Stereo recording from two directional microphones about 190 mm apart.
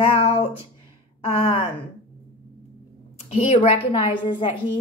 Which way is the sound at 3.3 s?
30° left (ahead or behind).